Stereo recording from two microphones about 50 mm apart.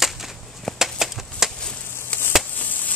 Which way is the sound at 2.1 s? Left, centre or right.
Left.